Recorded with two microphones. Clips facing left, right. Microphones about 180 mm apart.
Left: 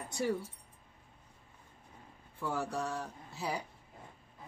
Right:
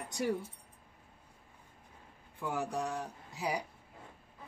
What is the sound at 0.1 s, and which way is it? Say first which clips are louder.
Speech: even; 15° right (ahead or behind).